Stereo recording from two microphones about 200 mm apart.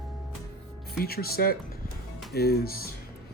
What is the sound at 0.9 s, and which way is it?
Speech, 50° left (ahead or behind).